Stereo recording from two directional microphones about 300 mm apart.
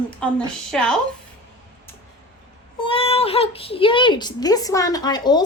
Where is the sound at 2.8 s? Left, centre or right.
Centre.